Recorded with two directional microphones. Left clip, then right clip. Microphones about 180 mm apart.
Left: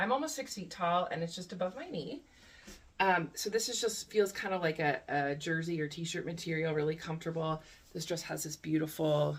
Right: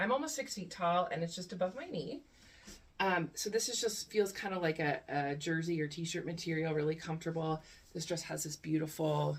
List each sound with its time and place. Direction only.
0.2 s speech: 20° left (ahead or behind)
3.0 s speech: 20° left (ahead or behind)